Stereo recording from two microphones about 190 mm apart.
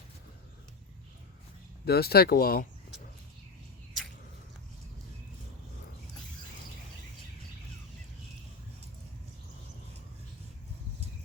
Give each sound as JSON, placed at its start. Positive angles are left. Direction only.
{"t": 1.8, "sound": "speech", "side_deg": 55}